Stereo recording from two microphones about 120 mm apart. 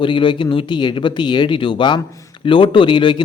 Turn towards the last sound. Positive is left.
turn(degrees=45)  # may be behind; listen again after turning